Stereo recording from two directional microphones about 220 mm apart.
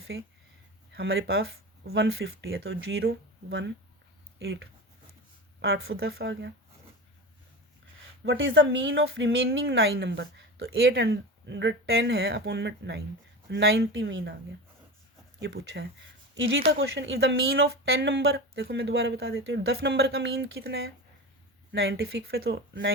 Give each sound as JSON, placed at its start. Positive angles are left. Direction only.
{"t": 0.1, "sound": "speech", "side_deg": -55}
{"t": 1.9, "sound": "speech", "side_deg": -60}
{"t": 4.4, "sound": "speech", "side_deg": -60}
{"t": 5.6, "sound": "speech", "side_deg": -45}
{"t": 8.2, "sound": "speech", "side_deg": -55}
{"t": 15.4, "sound": "speech", "side_deg": -50}
{"t": 20.4, "sound": "speech", "side_deg": -60}
{"t": 21.7, "sound": "speech", "side_deg": -45}